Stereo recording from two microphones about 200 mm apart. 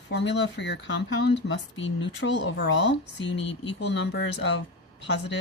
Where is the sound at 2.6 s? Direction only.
60° left (ahead or behind).